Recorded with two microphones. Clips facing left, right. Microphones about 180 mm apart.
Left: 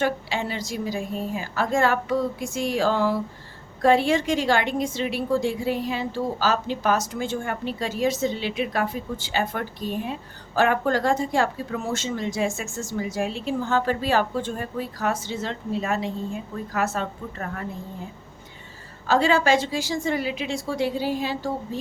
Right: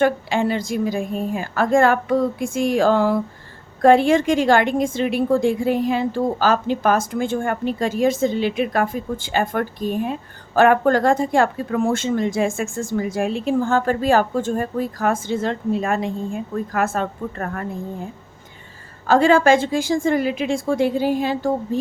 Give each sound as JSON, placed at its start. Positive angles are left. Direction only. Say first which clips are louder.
{"t": 0.0, "sound": "a woman's voice", "louder": "right 7 dB", "side_deg": -50}
{"t": 19.0, "sound": "a woman's voice", "louder": "right 6 dB", "side_deg": -50}